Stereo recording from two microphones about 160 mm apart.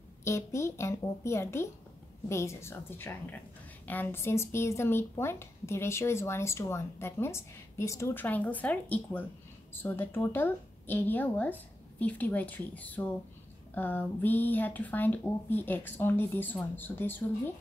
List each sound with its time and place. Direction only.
0.2 s speech: 15° left (ahead or behind)